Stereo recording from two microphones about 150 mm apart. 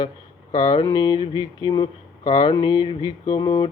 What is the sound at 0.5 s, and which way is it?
Speech, 25° left (ahead or behind).